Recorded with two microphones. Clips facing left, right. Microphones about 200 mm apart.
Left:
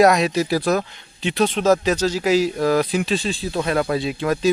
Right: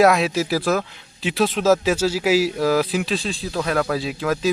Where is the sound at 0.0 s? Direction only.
Centre (ahead or behind).